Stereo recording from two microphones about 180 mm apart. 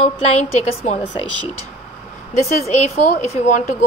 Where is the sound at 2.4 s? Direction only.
40° left (ahead or behind).